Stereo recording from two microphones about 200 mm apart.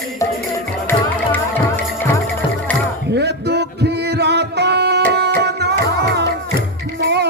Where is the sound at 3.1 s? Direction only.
55° right (ahead or behind).